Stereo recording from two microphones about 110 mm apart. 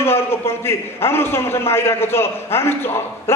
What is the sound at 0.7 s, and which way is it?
A man's voice, 20° left (ahead or behind).